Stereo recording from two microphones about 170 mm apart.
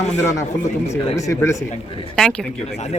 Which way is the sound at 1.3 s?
15° left (ahead or behind).